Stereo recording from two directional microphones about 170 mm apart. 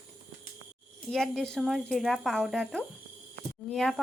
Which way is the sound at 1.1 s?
Centre (ahead or behind).